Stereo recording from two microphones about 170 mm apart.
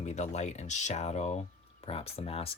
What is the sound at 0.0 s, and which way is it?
Speech, 40° left (ahead or behind).